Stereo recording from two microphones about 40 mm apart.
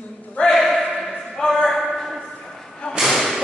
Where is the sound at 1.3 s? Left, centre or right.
Centre.